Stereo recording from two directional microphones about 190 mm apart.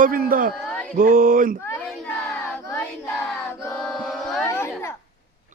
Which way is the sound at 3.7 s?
5° left (ahead or behind).